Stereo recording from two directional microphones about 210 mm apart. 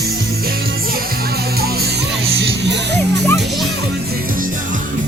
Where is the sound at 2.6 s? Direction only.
55° right (ahead or behind).